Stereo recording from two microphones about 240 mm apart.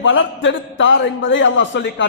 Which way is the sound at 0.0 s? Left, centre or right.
Left.